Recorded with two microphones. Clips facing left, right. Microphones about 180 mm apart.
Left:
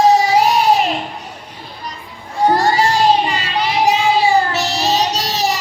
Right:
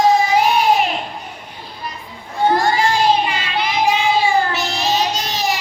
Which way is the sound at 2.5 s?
35° left (ahead or behind).